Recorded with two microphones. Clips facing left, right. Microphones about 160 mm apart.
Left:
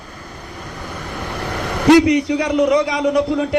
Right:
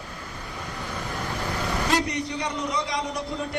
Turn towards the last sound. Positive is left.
turn(degrees=75)  # may be behind; listen again after turning